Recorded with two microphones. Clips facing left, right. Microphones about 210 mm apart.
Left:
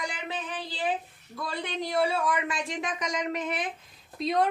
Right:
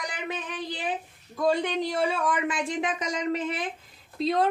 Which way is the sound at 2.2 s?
25° right (ahead or behind).